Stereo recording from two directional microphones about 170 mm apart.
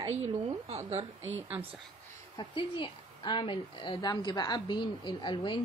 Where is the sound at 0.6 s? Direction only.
40° right (ahead or behind).